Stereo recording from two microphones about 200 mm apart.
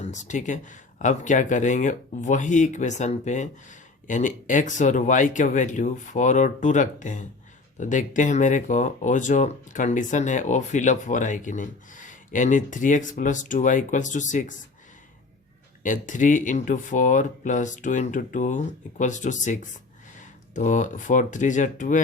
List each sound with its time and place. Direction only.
0.0 s speech: 35° left (ahead or behind)
15.8 s speech: 40° left (ahead or behind)